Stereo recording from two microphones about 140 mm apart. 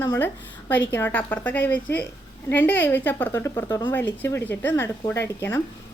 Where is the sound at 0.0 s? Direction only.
15° left (ahead or behind).